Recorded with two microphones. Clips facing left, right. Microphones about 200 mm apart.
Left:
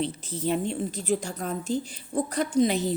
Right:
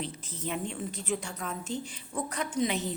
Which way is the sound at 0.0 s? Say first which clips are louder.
Left 8 dB; 30° left (ahead or behind).